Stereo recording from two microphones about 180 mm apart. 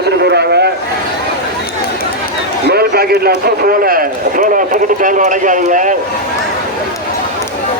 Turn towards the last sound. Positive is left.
turn(degrees=-45)  # may be behind; listen again after turning